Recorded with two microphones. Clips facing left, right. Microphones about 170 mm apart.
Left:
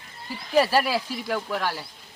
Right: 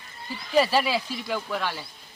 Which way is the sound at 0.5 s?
10° left (ahead or behind).